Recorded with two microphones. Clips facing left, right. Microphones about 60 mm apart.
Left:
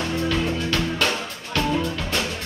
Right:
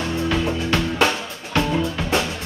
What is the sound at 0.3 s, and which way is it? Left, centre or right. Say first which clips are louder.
Music: right 2 dB; right.